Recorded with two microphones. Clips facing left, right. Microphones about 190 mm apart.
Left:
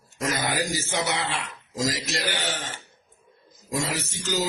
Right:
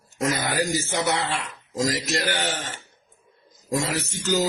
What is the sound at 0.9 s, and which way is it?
A man's voice, 50° right (ahead or behind).